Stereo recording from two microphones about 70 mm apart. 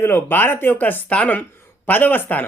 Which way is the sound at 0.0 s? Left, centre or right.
Left.